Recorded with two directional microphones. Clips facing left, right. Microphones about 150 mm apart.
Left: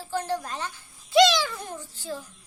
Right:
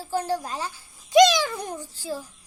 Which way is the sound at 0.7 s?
15° right (ahead or behind).